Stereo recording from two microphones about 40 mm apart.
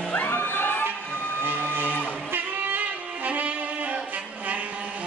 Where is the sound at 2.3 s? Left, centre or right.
Right.